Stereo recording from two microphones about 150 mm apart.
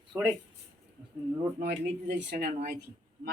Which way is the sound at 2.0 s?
80° right.